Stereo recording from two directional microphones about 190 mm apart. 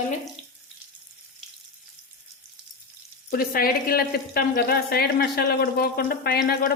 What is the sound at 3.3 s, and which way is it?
Speech, 50° left (ahead or behind).